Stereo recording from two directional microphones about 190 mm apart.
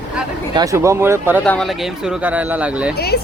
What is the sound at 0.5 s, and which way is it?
Speech, 15° right (ahead or behind).